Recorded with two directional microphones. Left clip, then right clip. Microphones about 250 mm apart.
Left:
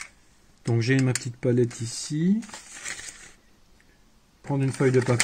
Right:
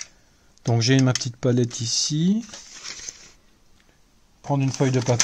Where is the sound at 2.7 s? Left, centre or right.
Centre.